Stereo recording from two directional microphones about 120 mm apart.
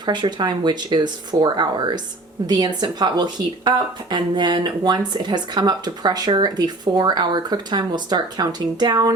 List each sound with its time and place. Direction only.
0.0 s speech: 40° right (ahead or behind)